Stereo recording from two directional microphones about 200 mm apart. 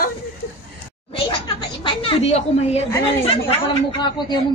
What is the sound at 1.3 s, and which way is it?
A woman's voice, 25° left (ahead or behind).